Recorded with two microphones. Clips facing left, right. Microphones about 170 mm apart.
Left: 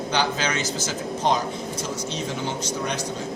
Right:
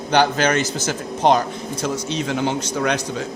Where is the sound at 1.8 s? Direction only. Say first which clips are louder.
Right 8 dB; 75° right (ahead or behind).